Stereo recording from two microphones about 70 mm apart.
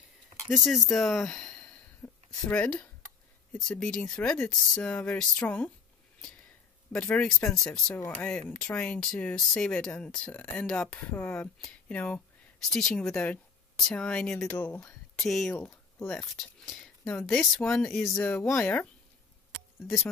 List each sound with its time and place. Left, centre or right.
0.7 s speech: centre
2.0 s a sound: left
2.4 s speech: left
6.9 s speech: centre
7.9 s speech: left
12.6 s speech: centre
14.6 s speech: left
15.1 s speech: centre
17.0 s speech: left
17.3 s speech: centre